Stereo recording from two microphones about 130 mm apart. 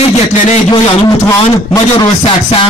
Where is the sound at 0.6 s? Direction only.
30° left (ahead or behind).